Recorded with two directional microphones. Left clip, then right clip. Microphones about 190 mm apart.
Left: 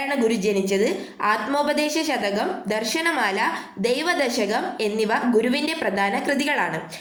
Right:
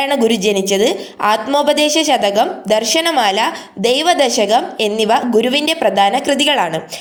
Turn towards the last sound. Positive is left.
turn(degrees=-45)  # may be behind; listen again after turning